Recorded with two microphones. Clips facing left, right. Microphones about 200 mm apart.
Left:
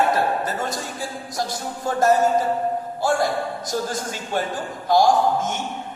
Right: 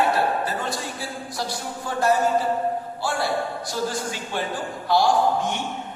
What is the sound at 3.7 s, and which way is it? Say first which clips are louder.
Speech: left 1 dB; 45° left (ahead or behind).